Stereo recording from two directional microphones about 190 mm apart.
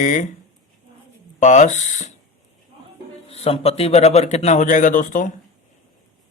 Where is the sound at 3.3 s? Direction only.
30° left (ahead or behind).